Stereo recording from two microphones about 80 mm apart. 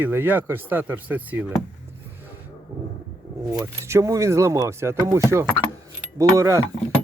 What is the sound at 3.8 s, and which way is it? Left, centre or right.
Speech, right.